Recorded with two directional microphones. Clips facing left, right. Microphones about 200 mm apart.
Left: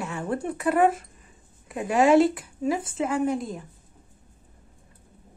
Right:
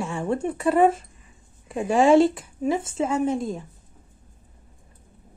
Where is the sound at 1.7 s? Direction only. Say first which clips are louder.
Right 2 dB; 25° right (ahead or behind).